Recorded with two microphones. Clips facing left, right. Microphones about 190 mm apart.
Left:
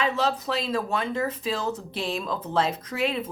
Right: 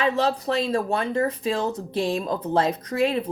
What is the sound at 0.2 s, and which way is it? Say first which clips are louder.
A woman's voice: right 3 dB; 35° right (ahead or behind).